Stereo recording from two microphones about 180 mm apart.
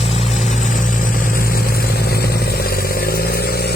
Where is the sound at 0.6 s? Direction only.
45° left (ahead or behind).